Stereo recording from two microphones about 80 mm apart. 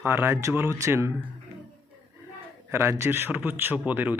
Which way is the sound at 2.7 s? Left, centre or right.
Right.